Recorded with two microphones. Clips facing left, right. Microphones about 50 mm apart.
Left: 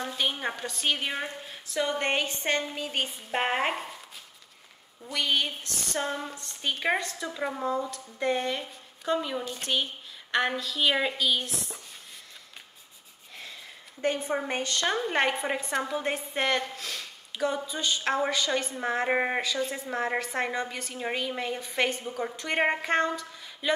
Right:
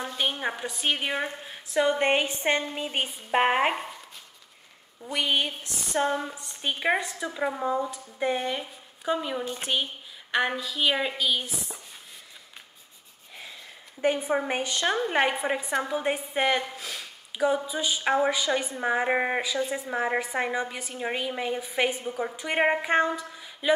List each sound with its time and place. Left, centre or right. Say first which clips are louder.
0.0 s a woman's voice: right 1 dB; centre
5.0 s a woman's voice: right 1 dB; centre
14.0 s a woman's voice: right 3 dB; centre